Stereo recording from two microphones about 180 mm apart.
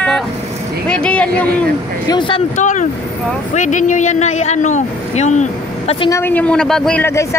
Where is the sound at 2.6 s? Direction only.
45° left (ahead or behind).